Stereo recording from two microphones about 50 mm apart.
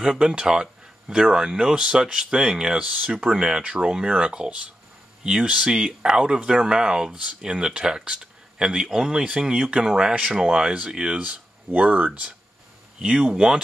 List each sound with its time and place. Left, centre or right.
0.0 s speech: centre
11.7 s speech: right
12.1 s speech: right